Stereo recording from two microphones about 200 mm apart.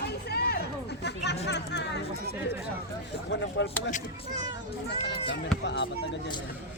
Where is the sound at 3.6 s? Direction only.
60° left (ahead or behind).